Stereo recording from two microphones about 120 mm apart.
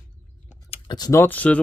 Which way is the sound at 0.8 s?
35° left (ahead or behind).